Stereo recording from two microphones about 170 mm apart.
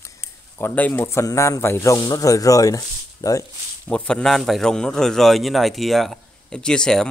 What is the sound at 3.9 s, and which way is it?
A man's voice, 5° left (ahead or behind).